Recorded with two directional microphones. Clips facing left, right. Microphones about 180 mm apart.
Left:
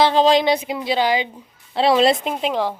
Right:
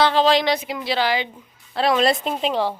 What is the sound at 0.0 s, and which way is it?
Speech, 20° left (ahead or behind).